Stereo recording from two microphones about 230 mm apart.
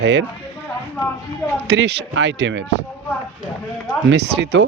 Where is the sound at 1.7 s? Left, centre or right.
Right.